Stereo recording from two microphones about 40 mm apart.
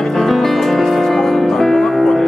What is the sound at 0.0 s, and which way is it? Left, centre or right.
Music, centre.